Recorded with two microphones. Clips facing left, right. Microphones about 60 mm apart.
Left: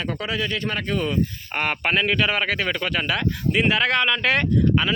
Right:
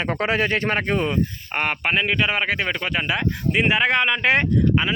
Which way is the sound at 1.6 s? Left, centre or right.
Centre.